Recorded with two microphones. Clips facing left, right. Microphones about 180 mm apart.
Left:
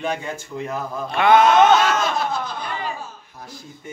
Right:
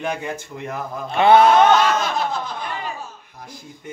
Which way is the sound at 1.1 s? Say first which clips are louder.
Right 2 dB; 30° right (ahead or behind).